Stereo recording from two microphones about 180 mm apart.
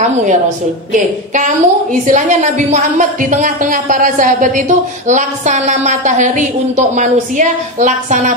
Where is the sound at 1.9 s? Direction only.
45° right (ahead or behind).